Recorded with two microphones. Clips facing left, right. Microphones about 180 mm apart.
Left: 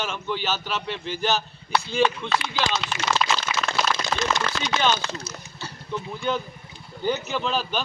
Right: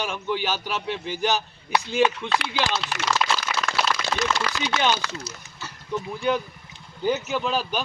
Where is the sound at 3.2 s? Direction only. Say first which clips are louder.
Even; 60° right (ahead or behind).